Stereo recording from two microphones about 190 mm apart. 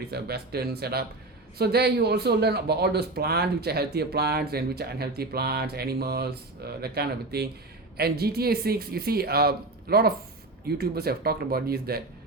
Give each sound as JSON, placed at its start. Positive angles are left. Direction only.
{"t": 0.1, "sound": "speech", "side_deg": -55}